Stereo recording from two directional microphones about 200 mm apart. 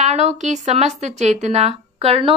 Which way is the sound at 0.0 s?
35° right (ahead or behind).